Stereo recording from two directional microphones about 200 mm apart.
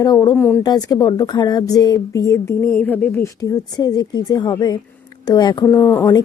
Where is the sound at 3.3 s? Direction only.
20° left (ahead or behind).